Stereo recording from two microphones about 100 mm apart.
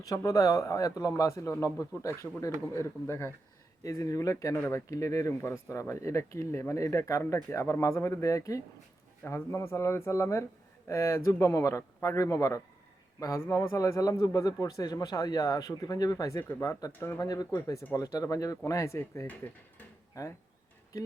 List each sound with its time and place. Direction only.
0.0 s speech: 35° left (ahead or behind)